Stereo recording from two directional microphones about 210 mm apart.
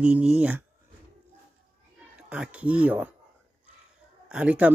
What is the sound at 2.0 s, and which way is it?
Speech, 5° right (ahead or behind).